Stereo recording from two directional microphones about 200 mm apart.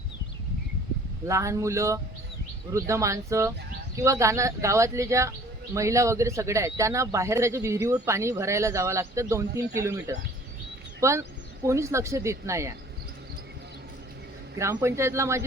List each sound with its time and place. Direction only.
1.2 s speech: 15° right (ahead or behind)
14.6 s speech: 15° right (ahead or behind)